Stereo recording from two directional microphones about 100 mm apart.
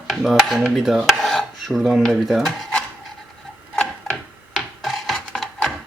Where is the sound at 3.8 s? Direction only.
5° left (ahead or behind).